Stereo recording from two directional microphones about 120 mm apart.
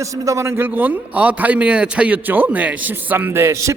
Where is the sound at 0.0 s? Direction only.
25° right (ahead or behind).